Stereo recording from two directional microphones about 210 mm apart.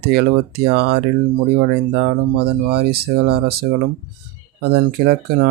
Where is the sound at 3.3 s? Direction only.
50° right (ahead or behind).